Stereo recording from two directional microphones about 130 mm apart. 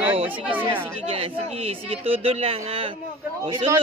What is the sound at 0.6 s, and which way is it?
Speech, 15° right (ahead or behind).